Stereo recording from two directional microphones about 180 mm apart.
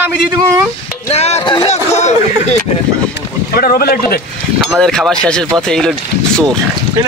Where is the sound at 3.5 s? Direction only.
55° left (ahead or behind).